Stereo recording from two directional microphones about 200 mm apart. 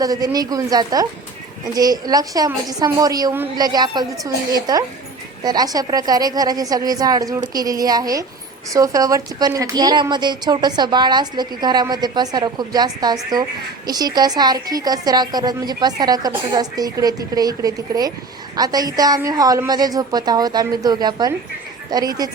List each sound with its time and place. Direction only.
0.0 s a woman's voice: 20° right (ahead or behind)